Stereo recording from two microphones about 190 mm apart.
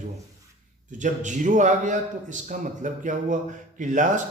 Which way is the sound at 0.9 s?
40° right (ahead or behind).